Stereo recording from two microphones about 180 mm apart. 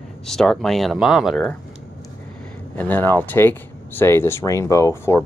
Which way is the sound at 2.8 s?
10° left (ahead or behind).